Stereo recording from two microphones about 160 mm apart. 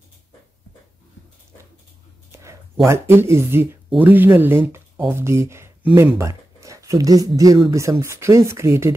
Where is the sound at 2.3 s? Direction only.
20° right (ahead or behind).